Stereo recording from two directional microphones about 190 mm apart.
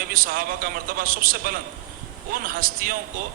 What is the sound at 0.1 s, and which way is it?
A man's voice, 50° right (ahead or behind).